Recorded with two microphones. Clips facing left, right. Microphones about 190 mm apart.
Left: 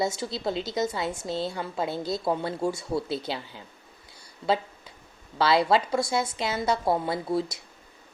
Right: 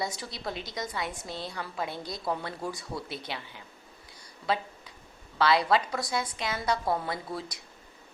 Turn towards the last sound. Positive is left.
turn(degrees=25)  # may be behind; listen again after turning